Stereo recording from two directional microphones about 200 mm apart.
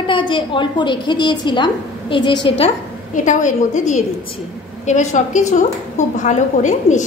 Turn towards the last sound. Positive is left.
turn(degrees=40)  # may be behind; listen again after turning